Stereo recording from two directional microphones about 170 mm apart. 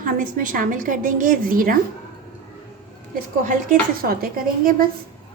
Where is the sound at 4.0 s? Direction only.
60° right (ahead or behind).